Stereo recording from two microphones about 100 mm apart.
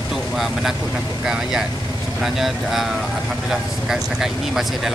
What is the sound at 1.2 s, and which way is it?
Speech, 5° right (ahead or behind).